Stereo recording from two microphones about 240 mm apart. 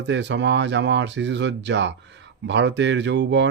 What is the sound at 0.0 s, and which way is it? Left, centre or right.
Speech, right.